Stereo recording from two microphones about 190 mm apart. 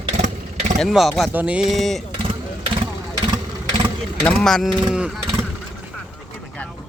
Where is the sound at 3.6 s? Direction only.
25° right (ahead or behind).